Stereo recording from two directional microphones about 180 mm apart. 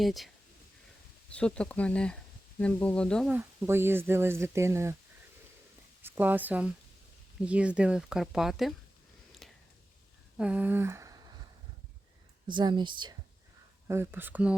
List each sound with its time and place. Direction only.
0.0 s speech: centre (ahead or behind)
1.3 s speech: 5° left (ahead or behind)
3.3 s speech: 10° right (ahead or behind)
6.0 s a woman's voice: 10° right (ahead or behind)
9.4 s a sound: centre (ahead or behind); by 11.3 s 20° right (ahead or behind)
12.5 s speech: 25° right (ahead or behind)
13.8 s speech: 15° right (ahead or behind)